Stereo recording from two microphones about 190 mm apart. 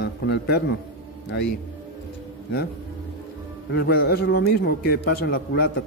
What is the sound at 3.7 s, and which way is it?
A man's voice, 55° left (ahead or behind).